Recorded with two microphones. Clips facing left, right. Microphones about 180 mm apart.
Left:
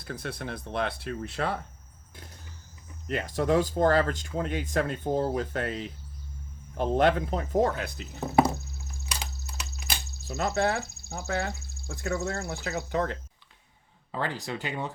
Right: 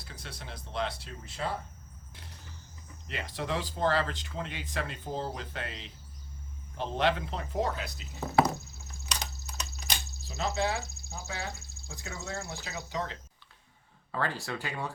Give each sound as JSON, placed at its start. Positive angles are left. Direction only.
{"t": 0.0, "sound": "speech", "side_deg": 55}
{"t": 3.1, "sound": "speech", "side_deg": 45}
{"t": 9.0, "sound": "a sound", "side_deg": 10}
{"t": 10.2, "sound": "speech", "side_deg": 55}
{"t": 14.1, "sound": "speech", "side_deg": 20}